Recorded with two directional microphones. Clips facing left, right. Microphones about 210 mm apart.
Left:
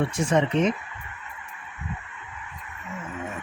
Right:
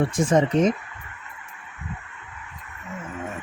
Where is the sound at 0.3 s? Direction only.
40° right (ahead or behind).